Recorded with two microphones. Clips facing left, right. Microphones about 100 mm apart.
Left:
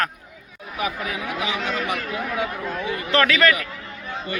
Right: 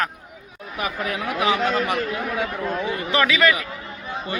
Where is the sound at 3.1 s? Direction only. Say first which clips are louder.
Left 1 dB; 10° right (ahead or behind).